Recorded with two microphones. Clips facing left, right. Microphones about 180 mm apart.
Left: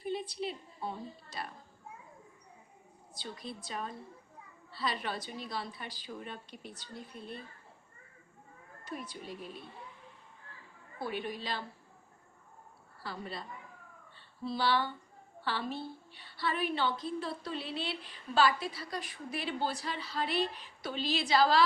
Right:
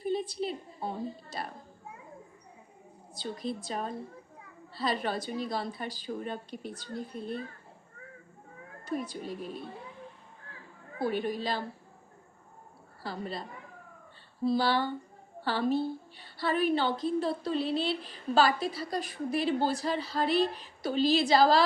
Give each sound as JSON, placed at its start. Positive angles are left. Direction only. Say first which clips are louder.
{"t": 0.0, "sound": "a sound", "louder": "right 5 dB", "side_deg": -40}
{"t": 3.2, "sound": "a woman's voice", "louder": "right 8 dB", "side_deg": -40}
{"t": 8.8, "sound": "a woman's voice", "louder": "right 8 dB", "side_deg": -45}
{"t": 11.0, "sound": "a woman's voice", "louder": "right 7 dB", "side_deg": -40}
{"t": 13.0, "sound": "a woman's voice", "louder": "right 5 dB", "side_deg": -40}
{"t": 14.4, "sound": "a woman's voice", "louder": "right 5 dB", "side_deg": -40}